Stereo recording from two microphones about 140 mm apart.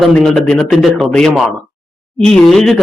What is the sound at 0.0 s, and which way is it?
Speech, 5° left (ahead or behind).